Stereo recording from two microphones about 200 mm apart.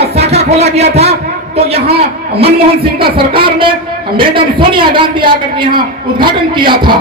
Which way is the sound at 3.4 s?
25° right (ahead or behind).